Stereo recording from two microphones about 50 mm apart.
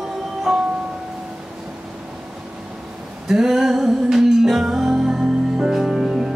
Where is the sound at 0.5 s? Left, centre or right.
Centre.